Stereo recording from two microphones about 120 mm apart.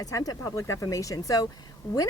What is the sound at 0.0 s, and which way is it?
Speech, 30° left (ahead or behind).